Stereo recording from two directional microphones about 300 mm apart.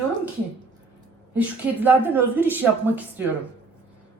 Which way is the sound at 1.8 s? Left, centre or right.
Centre.